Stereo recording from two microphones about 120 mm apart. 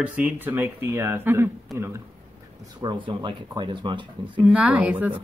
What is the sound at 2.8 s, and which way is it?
Speech, 45° right (ahead or behind).